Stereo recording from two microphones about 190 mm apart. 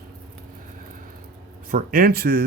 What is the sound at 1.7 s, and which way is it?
Speech, 45° right (ahead or behind).